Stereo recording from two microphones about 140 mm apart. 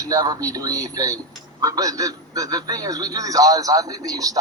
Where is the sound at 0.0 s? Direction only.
25° right (ahead or behind).